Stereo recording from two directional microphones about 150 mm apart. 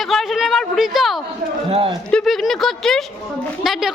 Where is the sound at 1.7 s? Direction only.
40° right (ahead or behind).